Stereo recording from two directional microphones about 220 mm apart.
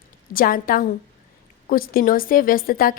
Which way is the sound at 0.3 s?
40° left (ahead or behind).